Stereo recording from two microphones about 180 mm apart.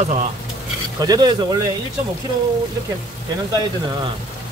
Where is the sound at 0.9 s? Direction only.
20° right (ahead or behind).